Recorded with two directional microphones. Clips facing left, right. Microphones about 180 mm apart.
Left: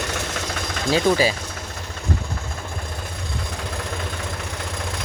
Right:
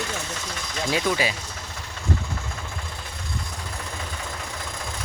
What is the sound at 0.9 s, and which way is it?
Speech, 30° left (ahead or behind).